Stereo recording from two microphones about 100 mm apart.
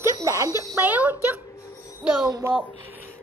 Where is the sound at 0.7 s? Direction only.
15° right (ahead or behind).